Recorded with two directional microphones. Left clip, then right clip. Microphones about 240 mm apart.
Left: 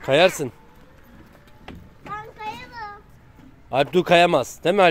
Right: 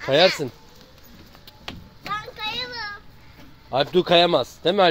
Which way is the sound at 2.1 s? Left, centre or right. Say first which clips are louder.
Right 4 dB; right.